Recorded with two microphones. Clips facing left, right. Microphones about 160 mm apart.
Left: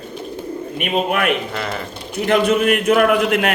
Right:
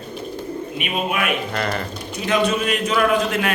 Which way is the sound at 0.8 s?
60° left (ahead or behind).